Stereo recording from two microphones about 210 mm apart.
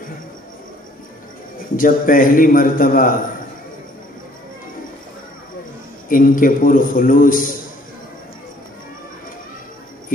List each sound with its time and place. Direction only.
1.8 s a man's voice: 40° left (ahead or behind)
6.0 s a man's voice: 40° left (ahead or behind)